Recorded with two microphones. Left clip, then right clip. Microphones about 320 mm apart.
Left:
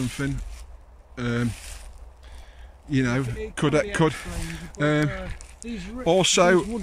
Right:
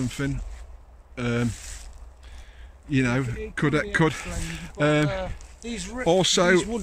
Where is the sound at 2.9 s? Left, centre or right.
Centre.